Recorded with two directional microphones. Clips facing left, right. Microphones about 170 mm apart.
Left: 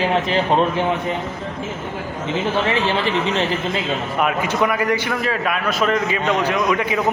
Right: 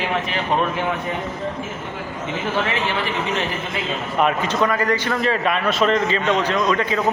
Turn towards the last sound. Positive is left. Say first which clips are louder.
# even
turn(degrees=15)  # may be behind; listen again after turning